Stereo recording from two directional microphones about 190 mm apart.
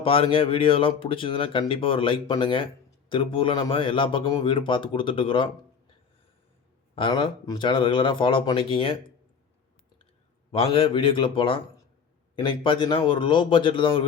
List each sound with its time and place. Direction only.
0.0 s speech: 30° left (ahead or behind)
6.9 s speech: 30° left (ahead or behind)
10.5 s speech: 30° left (ahead or behind)